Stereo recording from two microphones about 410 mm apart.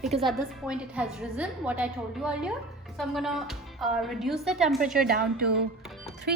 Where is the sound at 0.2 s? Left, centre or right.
Centre.